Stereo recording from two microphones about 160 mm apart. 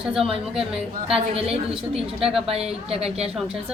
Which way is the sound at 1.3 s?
35° right (ahead or behind).